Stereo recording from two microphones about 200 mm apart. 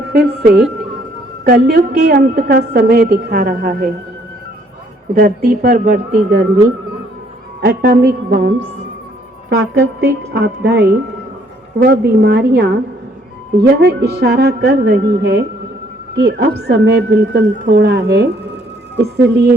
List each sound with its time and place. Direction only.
0.1 s a woman's voice: 50° right (ahead or behind)
5.1 s a woman's voice: 50° right (ahead or behind)
7.6 s a woman's voice: 55° right (ahead or behind)